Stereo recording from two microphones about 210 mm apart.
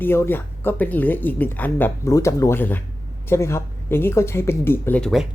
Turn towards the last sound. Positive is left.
turn(degrees=0)  # may be behind; listen again after turning